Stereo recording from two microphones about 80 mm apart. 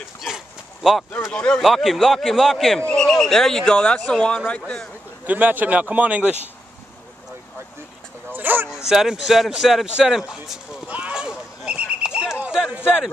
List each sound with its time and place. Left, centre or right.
1.3 s speech: centre
1.6 s speech: centre
5.2 s speech: right
8.3 s a sound: right
8.6 s speech: centre
10.9 s a sound: centre